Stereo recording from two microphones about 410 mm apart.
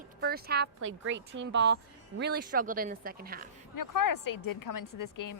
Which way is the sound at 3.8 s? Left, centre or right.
Left.